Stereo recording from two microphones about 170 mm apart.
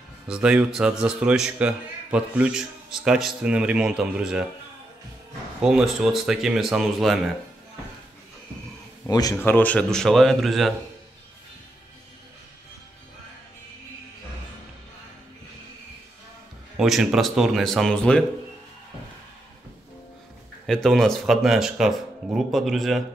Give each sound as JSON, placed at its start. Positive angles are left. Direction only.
{"t": 0.3, "sound": "speech", "side_deg": -5}
{"t": 5.6, "sound": "speech", "side_deg": -5}
{"t": 9.0, "sound": "a man's voice", "side_deg": 20}
{"t": 16.7, "sound": "speech", "side_deg": 0}
{"t": 20.6, "sound": "speech", "side_deg": 0}